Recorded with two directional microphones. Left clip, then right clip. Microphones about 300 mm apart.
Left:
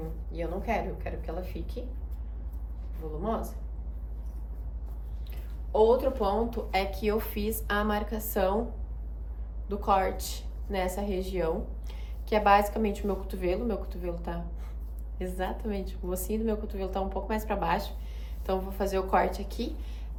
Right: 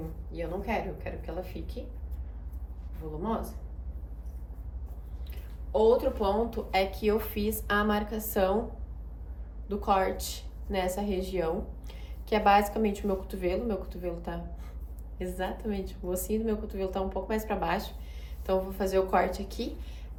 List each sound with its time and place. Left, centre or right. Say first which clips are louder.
0.3 s a woman's voice: left 1 dB; centre
3.2 s a woman's voice: left 1 dB; centre
5.7 s a woman's voice: left 1 dB; centre
9.6 s a woman's voice: left 1 dB; centre